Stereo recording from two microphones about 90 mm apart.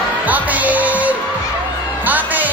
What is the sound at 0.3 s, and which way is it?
Music, 20° right (ahead or behind).